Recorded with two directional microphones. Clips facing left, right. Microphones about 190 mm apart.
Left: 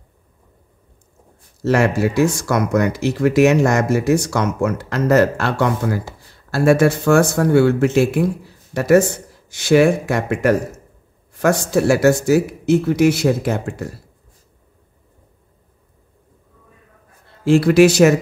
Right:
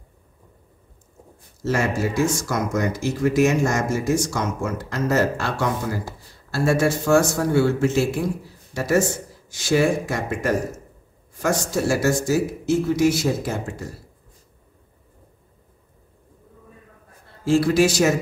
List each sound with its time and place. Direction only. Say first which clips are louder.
1.6 s speech: left 6 dB; 65° left (ahead or behind)
17.5 s speech: left 6 dB; 65° left (ahead or behind)